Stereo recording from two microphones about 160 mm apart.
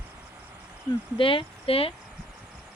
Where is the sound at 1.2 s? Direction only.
35° left (ahead or behind).